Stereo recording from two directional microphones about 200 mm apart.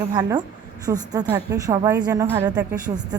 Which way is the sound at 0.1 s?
20° right (ahead or behind).